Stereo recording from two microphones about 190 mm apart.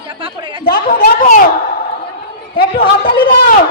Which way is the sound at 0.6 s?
50° left (ahead or behind).